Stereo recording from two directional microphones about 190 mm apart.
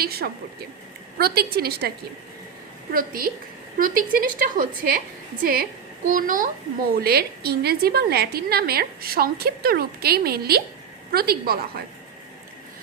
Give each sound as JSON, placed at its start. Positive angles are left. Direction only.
{"t": 0.0, "sound": "a woman's voice", "side_deg": -55}
{"t": 2.9, "sound": "a woman's voice", "side_deg": -50}